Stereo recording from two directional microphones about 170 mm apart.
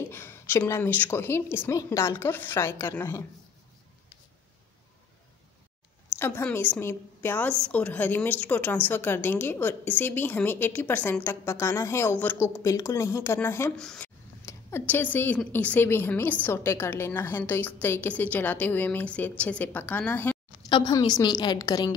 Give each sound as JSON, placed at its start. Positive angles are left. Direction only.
{"t": 0.1, "sound": "a woman's voice", "side_deg": 15}
{"t": 6.1, "sound": "a woman's voice", "side_deg": 15}
{"t": 20.6, "sound": "a woman's voice", "side_deg": 25}